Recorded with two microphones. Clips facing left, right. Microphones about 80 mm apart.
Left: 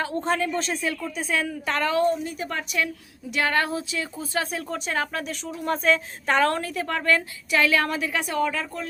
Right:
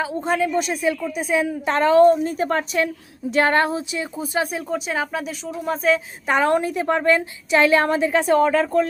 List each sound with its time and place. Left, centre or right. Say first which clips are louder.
0.0 s speech: right 3 dB; centre; by 8.9 s right